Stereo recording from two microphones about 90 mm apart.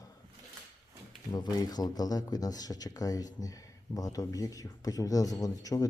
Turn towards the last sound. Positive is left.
turn(degrees=40)  # may be behind; listen again after turning